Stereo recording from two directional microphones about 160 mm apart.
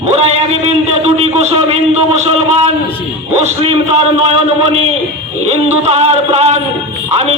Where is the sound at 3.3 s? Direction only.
45° right (ahead or behind).